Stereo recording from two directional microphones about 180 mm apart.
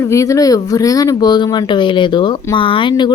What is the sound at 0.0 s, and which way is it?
Speech, 15° left (ahead or behind).